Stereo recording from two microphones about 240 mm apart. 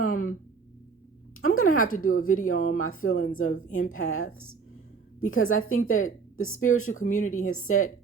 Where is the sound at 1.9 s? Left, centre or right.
Left.